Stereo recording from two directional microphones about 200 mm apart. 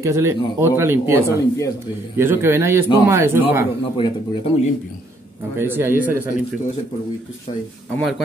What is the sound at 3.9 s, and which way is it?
Speech, 25° left (ahead or behind).